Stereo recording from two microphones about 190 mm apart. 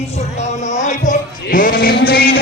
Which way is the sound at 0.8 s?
40° left (ahead or behind).